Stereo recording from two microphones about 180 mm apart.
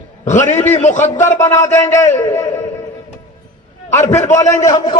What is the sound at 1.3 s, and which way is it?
A man's voice, 15° left (ahead or behind).